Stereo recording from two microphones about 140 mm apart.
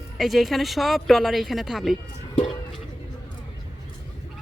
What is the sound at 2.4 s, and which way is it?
Music, 40° left (ahead or behind).